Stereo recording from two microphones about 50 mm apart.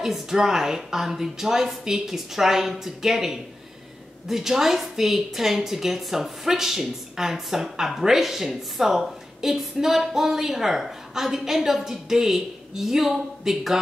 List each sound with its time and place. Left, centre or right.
0.0 s a woman's voice: centre